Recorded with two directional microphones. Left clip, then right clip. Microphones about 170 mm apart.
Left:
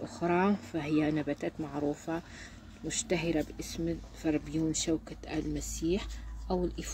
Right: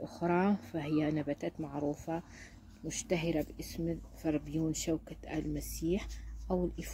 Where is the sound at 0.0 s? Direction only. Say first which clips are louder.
Left 3 dB; 15° right (ahead or behind).